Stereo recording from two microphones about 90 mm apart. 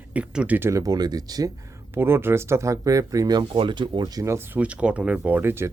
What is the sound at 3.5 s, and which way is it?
Speech, 65° right (ahead or behind).